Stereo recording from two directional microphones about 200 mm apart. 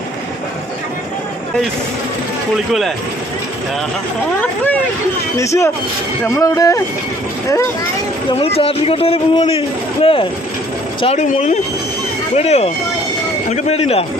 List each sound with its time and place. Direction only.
4.4 s speech: 10° left (ahead or behind)
8.3 s speech: 30° left (ahead or behind)